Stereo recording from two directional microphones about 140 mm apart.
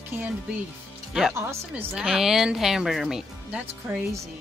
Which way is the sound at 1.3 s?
20° right (ahead or behind).